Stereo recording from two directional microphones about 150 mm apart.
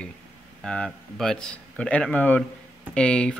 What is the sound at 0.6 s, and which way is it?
Speech, centre (ahead or behind).